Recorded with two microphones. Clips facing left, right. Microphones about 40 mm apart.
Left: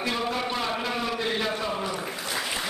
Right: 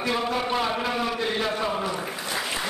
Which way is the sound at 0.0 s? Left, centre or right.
Centre.